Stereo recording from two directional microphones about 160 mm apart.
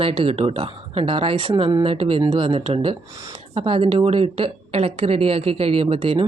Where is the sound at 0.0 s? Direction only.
35° right (ahead or behind).